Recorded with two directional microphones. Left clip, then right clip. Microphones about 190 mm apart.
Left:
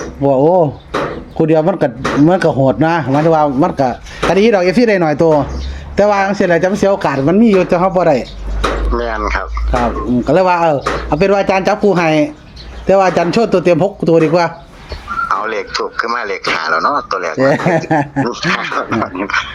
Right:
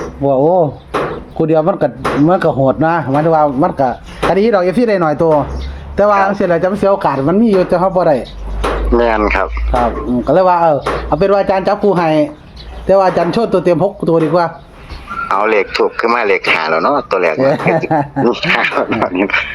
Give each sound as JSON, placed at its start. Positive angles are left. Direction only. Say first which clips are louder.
{"t": 0.2, "sound": "speech", "louder": "left 1 dB", "side_deg": 20}
{"t": 8.9, "sound": "speech", "louder": "right 5 dB", "side_deg": -20}
{"t": 10.2, "sound": "speech", "louder": "right 2 dB", "side_deg": 35}
{"t": 15.3, "sound": "a man's voice", "louder": "right 8 dB", "side_deg": -20}
{"t": 17.5, "sound": "speech", "louder": "even", "side_deg": 30}
{"t": 18.2, "sound": "a man's voice", "louder": "right 4 dB", "side_deg": -20}